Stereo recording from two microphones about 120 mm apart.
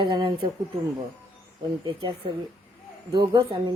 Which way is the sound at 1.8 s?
45° right (ahead or behind).